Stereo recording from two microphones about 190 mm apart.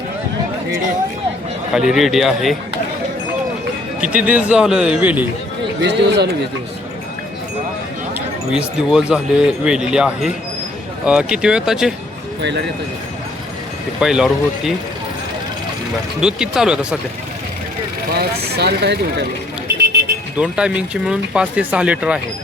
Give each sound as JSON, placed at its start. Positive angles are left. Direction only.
{"t": 1.7, "sound": "speech", "side_deg": 0}
{"t": 4.0, "sound": "a man's voice", "side_deg": -5}
{"t": 5.8, "sound": "speech", "side_deg": -65}
{"t": 8.5, "sound": "speech", "side_deg": -5}
{"t": 12.4, "sound": "speech", "side_deg": -65}
{"t": 14.0, "sound": "speech", "side_deg": -5}
{"t": 16.2, "sound": "speech", "side_deg": -5}
{"t": 18.1, "sound": "speech", "side_deg": -60}
{"t": 20.4, "sound": "speech", "side_deg": -5}